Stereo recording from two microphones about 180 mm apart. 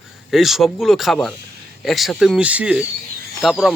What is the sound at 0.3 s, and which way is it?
Speech, centre (ahead or behind).